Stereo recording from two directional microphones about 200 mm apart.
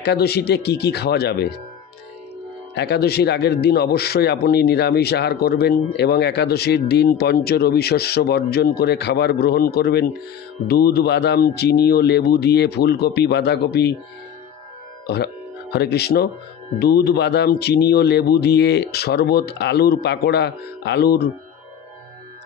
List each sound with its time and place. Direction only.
0.0 s a man's voice: 55° left (ahead or behind)
2.7 s a man's voice: 55° left (ahead or behind)
15.0 s a man's voice: 55° left (ahead or behind)